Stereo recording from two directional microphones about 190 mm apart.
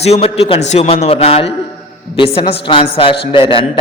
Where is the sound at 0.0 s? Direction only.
35° left (ahead or behind).